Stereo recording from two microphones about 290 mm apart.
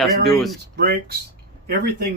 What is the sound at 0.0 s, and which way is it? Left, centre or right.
Speech, centre.